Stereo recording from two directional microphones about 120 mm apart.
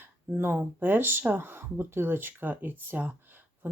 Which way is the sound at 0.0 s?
15° right (ahead or behind).